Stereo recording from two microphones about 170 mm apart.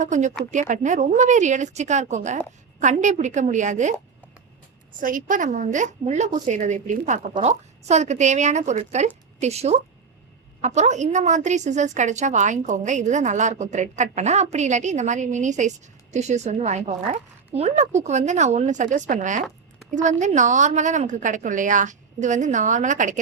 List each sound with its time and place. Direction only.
0.0 s a woman's voice: 45° right (ahead or behind)
4.9 s a woman's voice: 50° right (ahead or behind)